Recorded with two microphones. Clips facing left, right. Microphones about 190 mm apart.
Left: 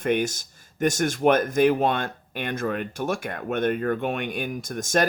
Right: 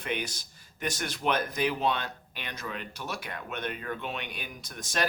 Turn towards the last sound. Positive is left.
turn(degrees=45)  # may be behind; listen again after turning